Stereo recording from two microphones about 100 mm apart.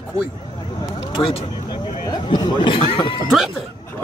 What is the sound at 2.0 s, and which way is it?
Speech, 45° left (ahead or behind).